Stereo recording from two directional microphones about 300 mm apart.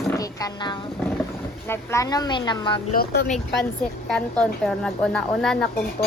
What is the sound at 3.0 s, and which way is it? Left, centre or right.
Speech, left.